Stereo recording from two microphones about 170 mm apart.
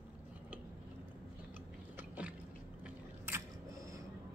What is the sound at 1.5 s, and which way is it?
Biting, 10° right (ahead or behind).